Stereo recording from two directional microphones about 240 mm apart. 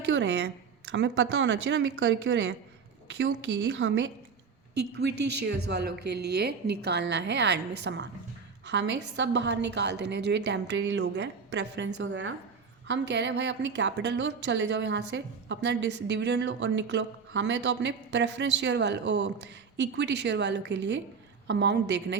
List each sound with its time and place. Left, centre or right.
0.1 s a woman's voice: right